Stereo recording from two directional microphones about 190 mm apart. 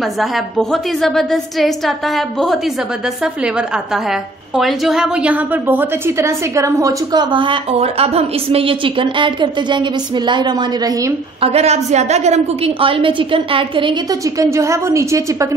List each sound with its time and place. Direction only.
0.2 s a woman's voice: centre (ahead or behind); by 11.1 s 20° right (ahead or behind)
11.4 s a woman's voice: 35° right (ahead or behind); by 15.3 s 15° right (ahead or behind)